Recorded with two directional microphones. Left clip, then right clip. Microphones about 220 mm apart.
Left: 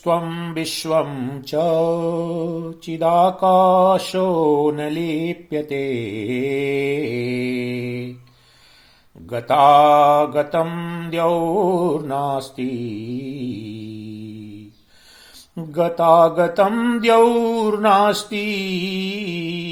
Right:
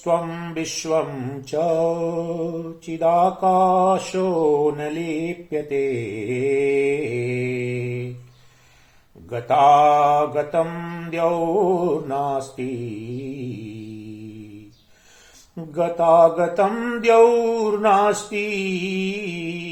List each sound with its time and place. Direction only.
0.0 s mantra: 40° left (ahead or behind)
9.3 s mantra: 40° left (ahead or behind)
15.5 s mantra: 40° left (ahead or behind)